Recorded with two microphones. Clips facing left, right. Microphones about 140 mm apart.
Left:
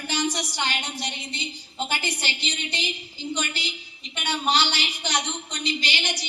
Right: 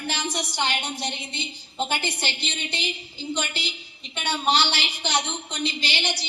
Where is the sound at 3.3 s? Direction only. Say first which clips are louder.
Right 1 dB; 25° right (ahead or behind).